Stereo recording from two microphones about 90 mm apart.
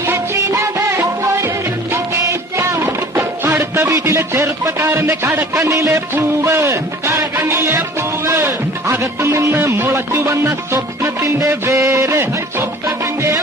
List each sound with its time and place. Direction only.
0.0 s music: 30° right (ahead or behind)